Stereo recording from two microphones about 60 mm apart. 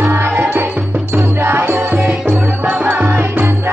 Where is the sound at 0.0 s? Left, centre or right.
Right.